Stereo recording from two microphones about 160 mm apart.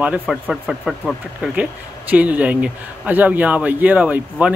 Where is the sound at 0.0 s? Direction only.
5° right (ahead or behind).